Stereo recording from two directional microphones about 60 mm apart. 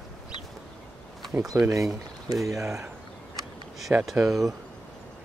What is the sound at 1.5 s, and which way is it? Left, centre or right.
Speech, right.